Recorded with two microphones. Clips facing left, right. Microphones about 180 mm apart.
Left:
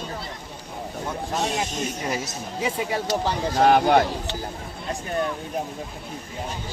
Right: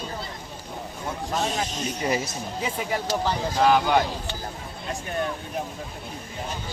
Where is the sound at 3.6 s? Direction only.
55° left (ahead or behind).